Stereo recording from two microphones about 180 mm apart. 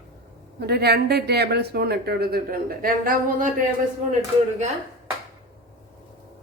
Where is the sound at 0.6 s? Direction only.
60° right (ahead or behind).